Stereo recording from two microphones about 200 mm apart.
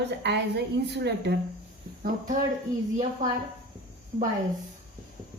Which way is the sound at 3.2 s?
40° right (ahead or behind).